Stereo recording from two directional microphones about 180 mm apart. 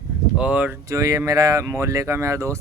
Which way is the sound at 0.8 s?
20° right (ahead or behind).